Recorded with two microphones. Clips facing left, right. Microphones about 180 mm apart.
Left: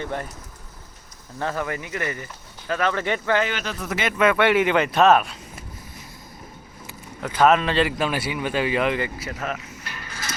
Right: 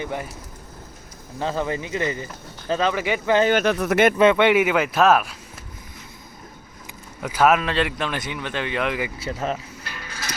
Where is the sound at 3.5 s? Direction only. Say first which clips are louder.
Right 10 dB; 55° right (ahead or behind).